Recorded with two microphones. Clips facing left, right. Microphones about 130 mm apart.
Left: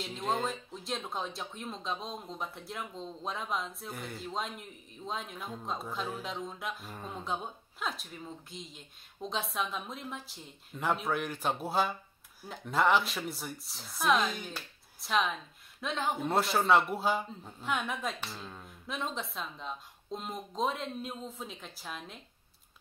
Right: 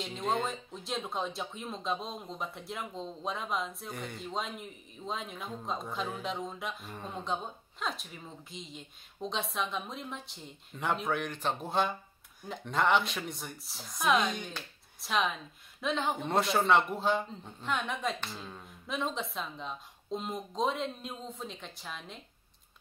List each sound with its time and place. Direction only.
0.0 s speech: centre (ahead or behind)